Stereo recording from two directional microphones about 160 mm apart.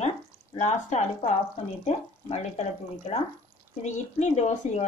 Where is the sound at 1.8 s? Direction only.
40° left (ahead or behind).